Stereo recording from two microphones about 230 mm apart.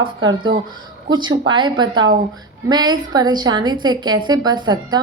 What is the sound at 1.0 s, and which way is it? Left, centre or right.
A woman's voice, centre.